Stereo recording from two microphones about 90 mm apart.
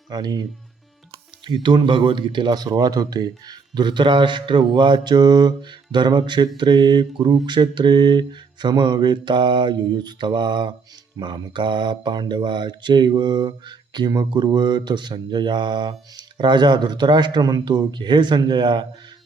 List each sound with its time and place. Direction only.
0.1 s speech: 50° right (ahead or behind)
1.5 s speech: 60° right (ahead or behind)